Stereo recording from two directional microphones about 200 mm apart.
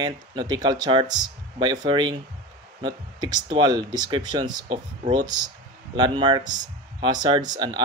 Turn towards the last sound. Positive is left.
turn(degrees=-20)  # may be behind; listen again after turning